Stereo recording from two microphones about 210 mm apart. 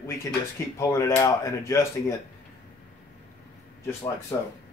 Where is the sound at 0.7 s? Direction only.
15° left (ahead or behind).